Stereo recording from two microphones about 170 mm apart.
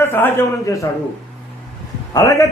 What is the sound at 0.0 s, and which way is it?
Speech, 10° left (ahead or behind).